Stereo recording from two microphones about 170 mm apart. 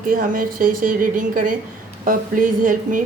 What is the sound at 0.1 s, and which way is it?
A woman's voice, 55° right (ahead or behind).